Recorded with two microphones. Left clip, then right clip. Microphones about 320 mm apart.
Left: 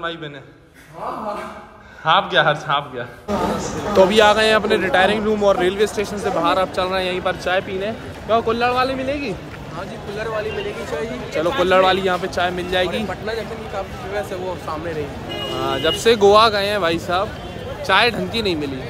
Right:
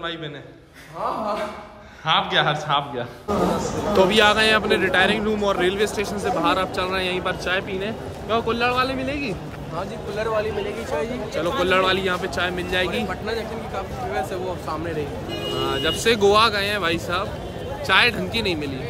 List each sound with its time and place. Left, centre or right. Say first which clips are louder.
2.0 s a man's voice: left 4 dB; centre
9.8 s speech: right 1 dB; right
11.3 s a man's voice: left 5 dB; centre